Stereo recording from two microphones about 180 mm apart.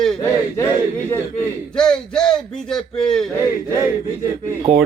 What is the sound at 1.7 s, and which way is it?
Speech, 5° left (ahead or behind).